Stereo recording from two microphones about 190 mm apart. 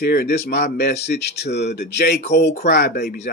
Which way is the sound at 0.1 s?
55° left (ahead or behind).